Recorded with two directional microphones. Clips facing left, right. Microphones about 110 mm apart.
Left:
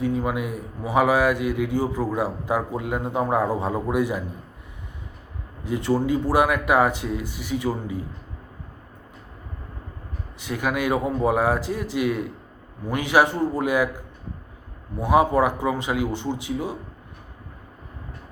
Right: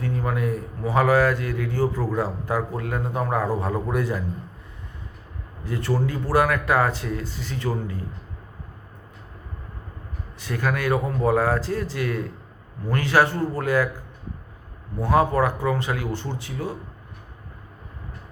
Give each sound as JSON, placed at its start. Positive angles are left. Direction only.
{"t": 0.0, "sound": "a man's voice", "side_deg": 15}
{"t": 5.6, "sound": "a man's voice", "side_deg": 15}
{"t": 10.4, "sound": "a man's voice", "side_deg": 15}
{"t": 14.9, "sound": "a man's voice", "side_deg": 15}